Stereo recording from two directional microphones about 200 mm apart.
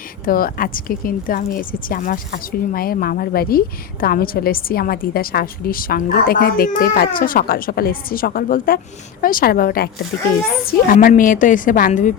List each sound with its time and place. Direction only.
0.3 s a woman's voice: 45° left (ahead or behind)